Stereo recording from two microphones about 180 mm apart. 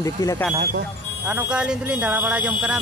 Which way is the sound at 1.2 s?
5° right (ahead or behind).